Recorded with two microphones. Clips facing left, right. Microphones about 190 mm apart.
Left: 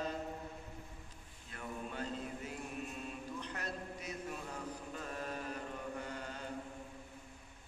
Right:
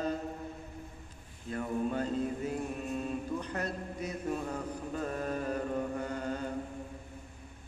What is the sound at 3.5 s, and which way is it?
Mantra, 45° right (ahead or behind).